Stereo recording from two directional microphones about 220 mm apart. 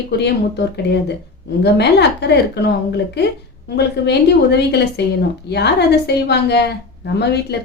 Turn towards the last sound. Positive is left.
turn(degrees=50)  # may be behind; listen again after turning